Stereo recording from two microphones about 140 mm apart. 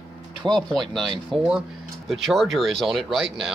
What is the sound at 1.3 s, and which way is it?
Speech, 40° right (ahead or behind).